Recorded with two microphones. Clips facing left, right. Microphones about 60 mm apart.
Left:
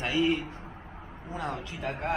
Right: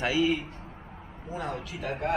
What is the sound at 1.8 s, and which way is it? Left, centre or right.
Speech, left.